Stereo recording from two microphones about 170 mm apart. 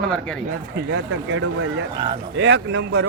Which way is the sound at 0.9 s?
90° right.